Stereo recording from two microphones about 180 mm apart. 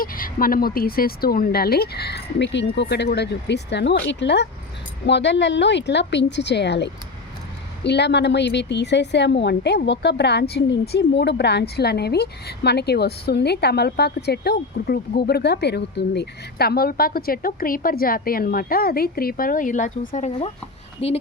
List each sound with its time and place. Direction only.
0.0 s a woman's voice: 50° left (ahead or behind); by 21.2 s 35° left (ahead or behind)